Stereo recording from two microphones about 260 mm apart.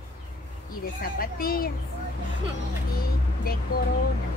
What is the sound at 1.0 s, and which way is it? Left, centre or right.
Speech, left.